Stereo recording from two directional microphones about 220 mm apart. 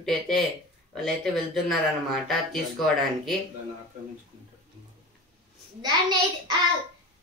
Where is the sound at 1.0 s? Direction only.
Centre (ahead or behind).